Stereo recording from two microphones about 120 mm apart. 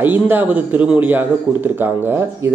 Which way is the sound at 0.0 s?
15° right (ahead or behind).